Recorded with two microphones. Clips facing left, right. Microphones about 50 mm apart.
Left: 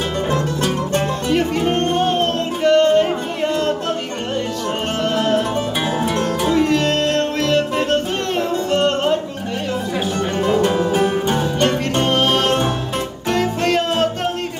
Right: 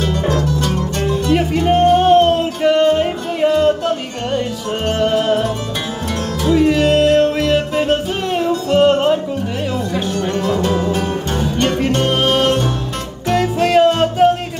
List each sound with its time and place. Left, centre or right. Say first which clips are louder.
0.3 s music: right 2 dB; left
1.3 s music: right 3 dB; centre
4.9 s music: right 3 dB; centre
6.5 s music: right 6 dB; centre
10.3 s music: left 2 dB; centre